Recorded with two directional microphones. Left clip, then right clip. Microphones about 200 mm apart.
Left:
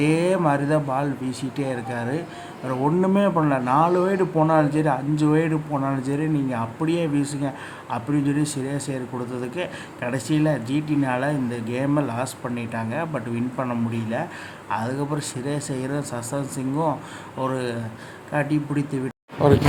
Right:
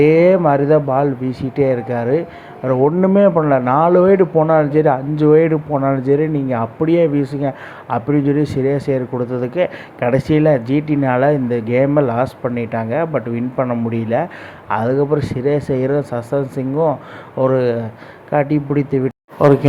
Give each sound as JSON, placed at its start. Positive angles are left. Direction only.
{"t": 0.0, "sound": "speech", "side_deg": -25}